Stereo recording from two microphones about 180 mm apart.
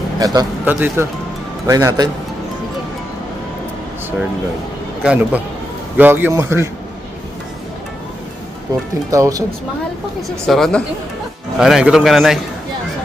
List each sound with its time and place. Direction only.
0.2 s a man's voice: 20° right (ahead or behind)
5.0 s a man's voice: 5° right (ahead or behind)
9.0 s a man's voice: 20° right (ahead or behind)
10.4 s a man's voice: 5° left (ahead or behind)